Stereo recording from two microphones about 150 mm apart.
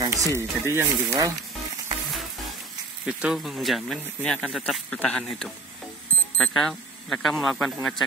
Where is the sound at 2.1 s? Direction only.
Centre (ahead or behind).